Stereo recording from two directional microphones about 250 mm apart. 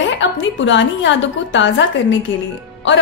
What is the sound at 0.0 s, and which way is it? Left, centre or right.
A woman's voice, left.